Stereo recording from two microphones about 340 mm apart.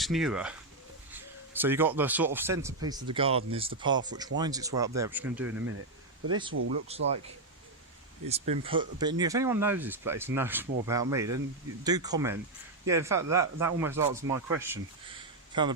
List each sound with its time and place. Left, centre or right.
0.0 s speech: centre
5.5 s speech: right
6.9 s speech: centre
8.3 s speech: centre